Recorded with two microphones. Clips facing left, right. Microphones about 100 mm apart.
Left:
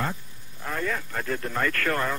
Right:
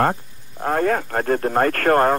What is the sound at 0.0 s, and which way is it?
Speech, 55° right (ahead or behind).